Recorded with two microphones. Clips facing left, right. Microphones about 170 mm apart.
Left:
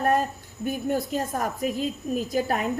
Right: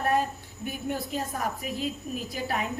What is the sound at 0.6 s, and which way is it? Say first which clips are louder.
A woman's voice: left 6 dB; 45° left (ahead or behind).